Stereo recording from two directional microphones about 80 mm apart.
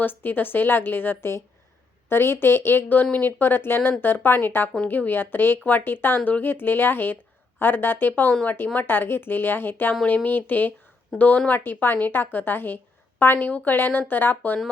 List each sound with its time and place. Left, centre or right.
0.0 s a woman's voice: left